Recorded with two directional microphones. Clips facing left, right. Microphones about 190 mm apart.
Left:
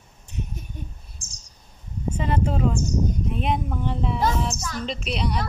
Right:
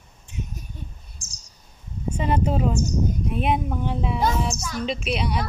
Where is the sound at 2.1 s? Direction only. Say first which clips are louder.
Right 2 dB; 20° right (ahead or behind).